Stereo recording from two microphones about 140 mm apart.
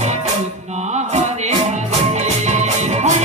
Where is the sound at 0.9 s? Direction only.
50° right (ahead or behind).